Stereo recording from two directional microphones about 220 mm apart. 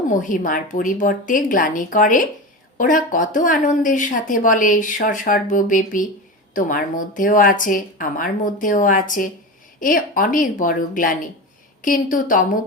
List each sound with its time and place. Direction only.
0.1 s speech: 35° left (ahead or behind)